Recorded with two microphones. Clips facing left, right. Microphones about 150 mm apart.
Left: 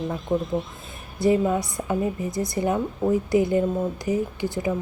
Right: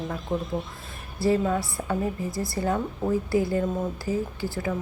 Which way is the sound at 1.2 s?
15° left (ahead or behind).